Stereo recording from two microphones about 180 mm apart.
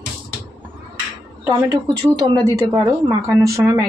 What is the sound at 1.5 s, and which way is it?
A woman's voice, 20° right (ahead or behind).